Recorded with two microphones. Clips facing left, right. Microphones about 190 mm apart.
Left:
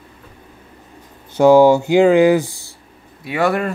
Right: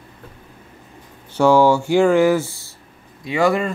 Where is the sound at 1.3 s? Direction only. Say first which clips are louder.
Left 4 dB; 15° left (ahead or behind).